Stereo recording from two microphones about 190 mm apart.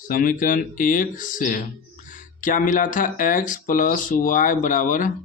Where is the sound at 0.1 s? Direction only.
45° left (ahead or behind).